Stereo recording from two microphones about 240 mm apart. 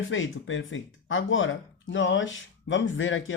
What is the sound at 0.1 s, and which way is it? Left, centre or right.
Speech, left.